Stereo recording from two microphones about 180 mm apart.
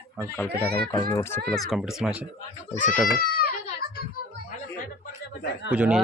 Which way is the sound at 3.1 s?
55° left (ahead or behind).